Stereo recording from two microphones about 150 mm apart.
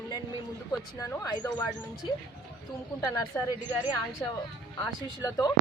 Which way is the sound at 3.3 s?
10° left (ahead or behind).